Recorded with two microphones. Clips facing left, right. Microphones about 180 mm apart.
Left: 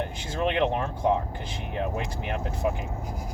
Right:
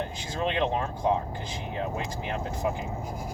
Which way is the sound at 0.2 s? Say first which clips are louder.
Left 3 dB; 60° left (ahead or behind).